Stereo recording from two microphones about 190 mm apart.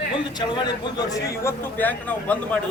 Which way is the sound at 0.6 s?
20° left (ahead or behind).